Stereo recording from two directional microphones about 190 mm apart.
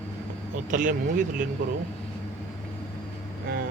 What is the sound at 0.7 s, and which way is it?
Speech, 45° right (ahead or behind).